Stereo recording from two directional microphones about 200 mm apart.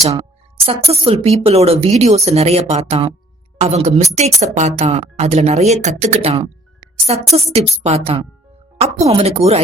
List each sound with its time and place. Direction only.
0.0 s speech: 30° right (ahead or behind)